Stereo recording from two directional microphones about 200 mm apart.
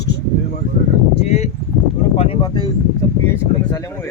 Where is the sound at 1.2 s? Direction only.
35° left (ahead or behind); by 3.9 s 15° left (ahead or behind).